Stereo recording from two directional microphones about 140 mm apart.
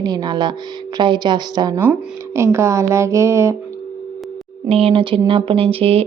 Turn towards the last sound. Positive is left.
turn(degrees=-45)  # may be behind; listen again after turning